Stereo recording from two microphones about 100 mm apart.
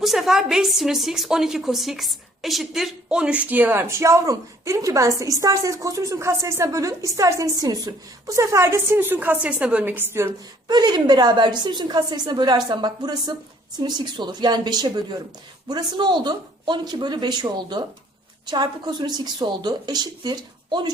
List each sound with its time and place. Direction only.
0.0 s a woman's voice: centre (ahead or behind); by 10.3 s 25° right (ahead or behind)
10.7 s a woman's voice: 45° right (ahead or behind)